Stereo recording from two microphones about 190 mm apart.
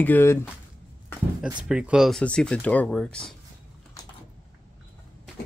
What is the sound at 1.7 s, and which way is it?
Speech, 5° right (ahead or behind).